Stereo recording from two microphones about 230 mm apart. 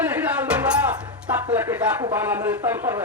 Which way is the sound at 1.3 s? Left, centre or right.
Centre.